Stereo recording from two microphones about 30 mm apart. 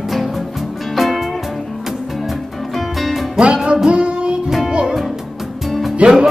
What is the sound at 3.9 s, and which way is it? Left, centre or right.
Music, right.